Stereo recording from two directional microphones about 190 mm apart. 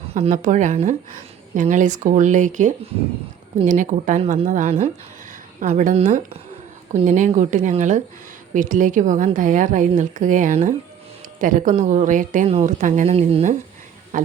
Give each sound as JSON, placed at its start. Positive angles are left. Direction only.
{"t": 0.1, "sound": "a woman's voice", "side_deg": -40}